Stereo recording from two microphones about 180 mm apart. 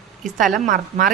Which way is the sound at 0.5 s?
50° right (ahead or behind).